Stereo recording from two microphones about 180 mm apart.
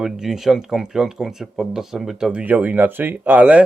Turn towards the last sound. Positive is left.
turn(degrees=-5)  # may be behind; listen again after turning